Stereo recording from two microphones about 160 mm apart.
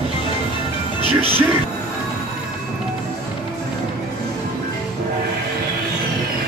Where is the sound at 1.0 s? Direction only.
35° right (ahead or behind).